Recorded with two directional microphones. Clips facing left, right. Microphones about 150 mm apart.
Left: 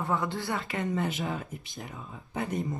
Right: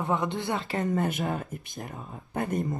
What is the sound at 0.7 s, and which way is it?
Speech, 45° right (ahead or behind).